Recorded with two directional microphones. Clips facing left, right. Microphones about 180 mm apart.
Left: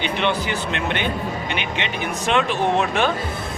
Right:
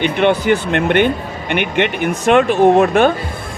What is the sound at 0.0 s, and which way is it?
Speech, 55° right (ahead or behind).